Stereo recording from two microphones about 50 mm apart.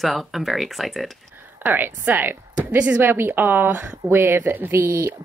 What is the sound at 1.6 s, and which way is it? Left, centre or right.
Speech, right.